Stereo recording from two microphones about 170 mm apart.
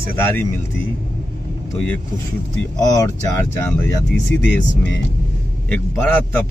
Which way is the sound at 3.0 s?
15° left (ahead or behind).